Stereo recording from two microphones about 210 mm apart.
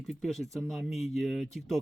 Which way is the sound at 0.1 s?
Centre (ahead or behind).